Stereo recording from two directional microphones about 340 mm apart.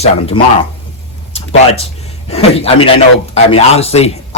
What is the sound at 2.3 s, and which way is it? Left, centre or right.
Speech, centre.